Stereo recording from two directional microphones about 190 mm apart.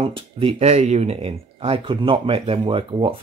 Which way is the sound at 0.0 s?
30° right (ahead or behind).